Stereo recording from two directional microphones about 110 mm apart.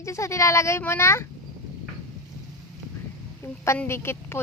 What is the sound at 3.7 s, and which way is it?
Speech, 20° left (ahead or behind).